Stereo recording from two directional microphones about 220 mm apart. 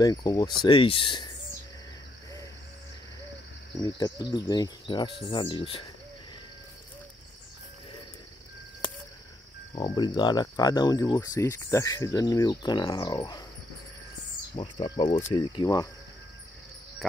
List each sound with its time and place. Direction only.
0.0 s speech: 15° left (ahead or behind)
3.8 s speech: 20° left (ahead or behind)
9.9 s speech: 20° left (ahead or behind)
14.5 s speech: 25° left (ahead or behind)
15.0 s speech: 35° left (ahead or behind)
15.3 s speech: 20° left (ahead or behind)